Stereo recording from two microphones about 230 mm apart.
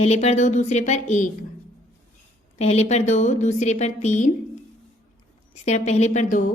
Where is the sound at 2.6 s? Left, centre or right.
Left.